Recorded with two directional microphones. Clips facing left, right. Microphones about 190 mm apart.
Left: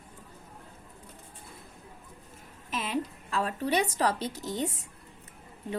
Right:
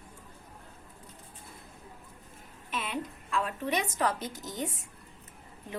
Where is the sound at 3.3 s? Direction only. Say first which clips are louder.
Left 2 dB; 35° left (ahead or behind).